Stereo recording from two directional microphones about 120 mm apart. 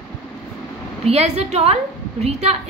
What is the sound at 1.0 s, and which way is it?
A woman's voice, 60° right (ahead or behind).